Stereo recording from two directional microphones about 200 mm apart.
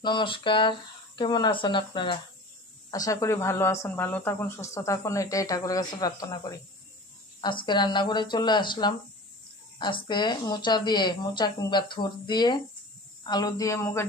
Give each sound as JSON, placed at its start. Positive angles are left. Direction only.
{"t": 0.0, "sound": "speech", "side_deg": 25}